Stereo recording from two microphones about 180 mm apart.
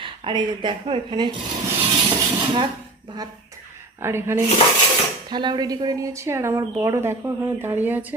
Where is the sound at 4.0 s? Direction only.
15° right (ahead or behind).